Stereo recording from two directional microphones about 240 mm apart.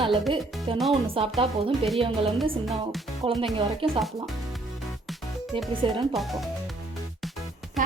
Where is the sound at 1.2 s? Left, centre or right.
Right.